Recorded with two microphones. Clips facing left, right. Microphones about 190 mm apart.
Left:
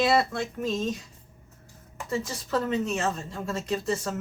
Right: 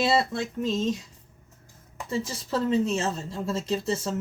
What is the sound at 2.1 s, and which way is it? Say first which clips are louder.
A woman's voice: even; 30° right (ahead or behind).